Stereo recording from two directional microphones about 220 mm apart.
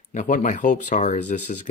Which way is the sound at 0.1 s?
35° left (ahead or behind).